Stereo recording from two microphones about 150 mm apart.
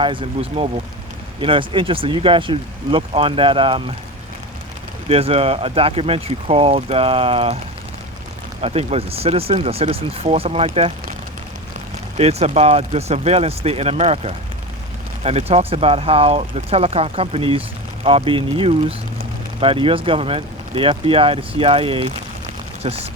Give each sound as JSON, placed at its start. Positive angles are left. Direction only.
{"t": 0.0, "sound": "speech", "side_deg": -35}
{"t": 5.0, "sound": "speech", "side_deg": -40}
{"t": 8.6, "sound": "speech", "side_deg": -45}
{"t": 12.1, "sound": "speech", "side_deg": -45}